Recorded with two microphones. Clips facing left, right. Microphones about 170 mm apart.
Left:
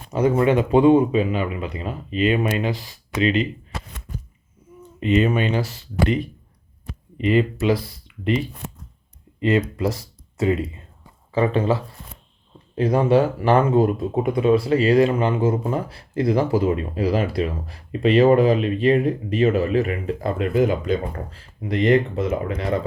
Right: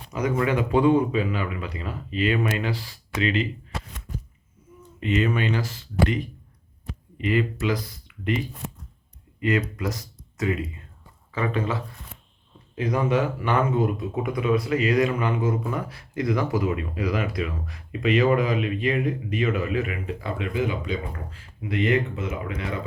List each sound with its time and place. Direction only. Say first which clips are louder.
0.1 s speech: left 6 dB; 30° left (ahead or behind)
4.9 s speech: left 5 dB; 25° left (ahead or behind)